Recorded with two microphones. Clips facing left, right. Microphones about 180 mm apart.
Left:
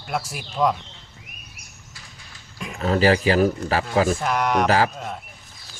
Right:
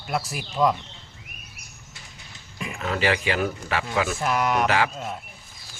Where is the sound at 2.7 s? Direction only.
35° left (ahead or behind).